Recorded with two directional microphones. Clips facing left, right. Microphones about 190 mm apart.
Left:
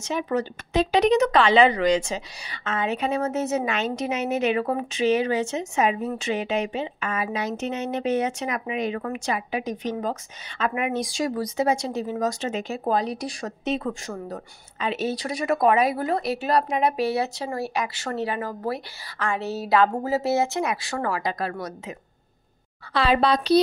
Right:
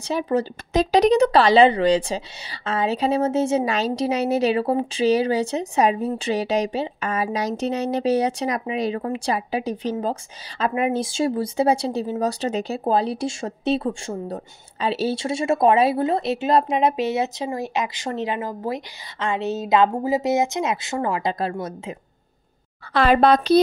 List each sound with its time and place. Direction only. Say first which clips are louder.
0.0 s speech: right 3 dB; 35° right (ahead or behind)
22.9 s a woman's voice: right 5 dB; 50° right (ahead or behind)